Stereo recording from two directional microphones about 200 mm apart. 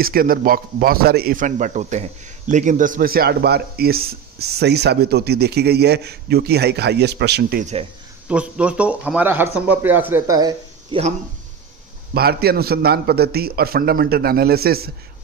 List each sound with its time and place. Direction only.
0.0 s speech: 45° right (ahead or behind)
8.3 s a man's voice: 5° right (ahead or behind)
12.1 s speech: 50° right (ahead or behind)